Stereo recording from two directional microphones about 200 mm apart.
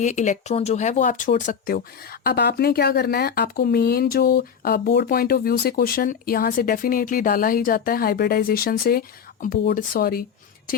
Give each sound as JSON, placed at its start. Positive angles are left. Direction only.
{"t": 0.0, "sound": "speech", "side_deg": 35}